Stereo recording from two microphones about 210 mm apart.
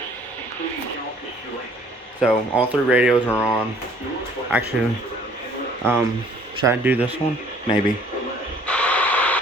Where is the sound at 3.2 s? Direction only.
10° left (ahead or behind).